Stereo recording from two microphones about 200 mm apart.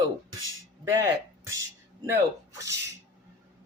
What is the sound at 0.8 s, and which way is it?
Speech, 15° right (ahead or behind).